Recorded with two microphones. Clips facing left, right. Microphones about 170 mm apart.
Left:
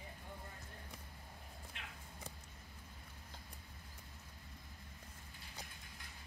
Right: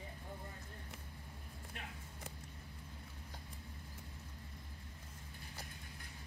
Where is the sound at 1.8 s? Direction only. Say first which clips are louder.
Right 5 dB; 45° right (ahead or behind).